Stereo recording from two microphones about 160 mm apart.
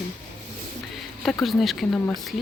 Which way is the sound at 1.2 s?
Centre (ahead or behind).